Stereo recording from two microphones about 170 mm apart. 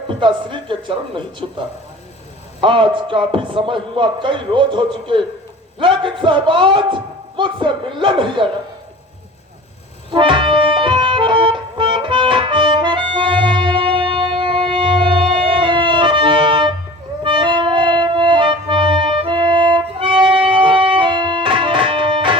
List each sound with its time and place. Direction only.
0.1 s a man's voice: 30° right (ahead or behind)
10.1 s music: 30° right (ahead or behind)